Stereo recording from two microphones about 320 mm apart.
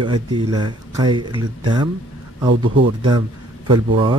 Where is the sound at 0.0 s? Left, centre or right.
Centre.